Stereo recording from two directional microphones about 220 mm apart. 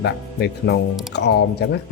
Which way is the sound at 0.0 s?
50° left (ahead or behind).